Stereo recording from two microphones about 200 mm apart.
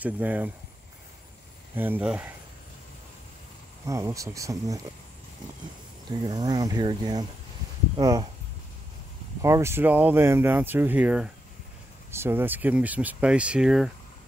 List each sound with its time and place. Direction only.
0.0 s speech: 10° right (ahead or behind)
1.8 s speech: 10° right (ahead or behind)
3.8 s speech: 15° right (ahead or behind)
6.0 s speech: 20° right (ahead or behind)
9.4 s speech: 15° right (ahead or behind)